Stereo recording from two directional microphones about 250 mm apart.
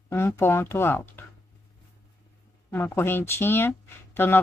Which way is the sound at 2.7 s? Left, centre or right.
Centre.